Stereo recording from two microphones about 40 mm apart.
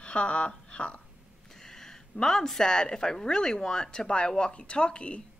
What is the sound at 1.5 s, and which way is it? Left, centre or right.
Speech, centre.